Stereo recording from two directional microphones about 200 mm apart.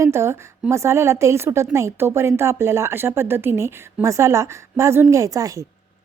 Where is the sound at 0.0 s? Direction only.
15° right (ahead or behind).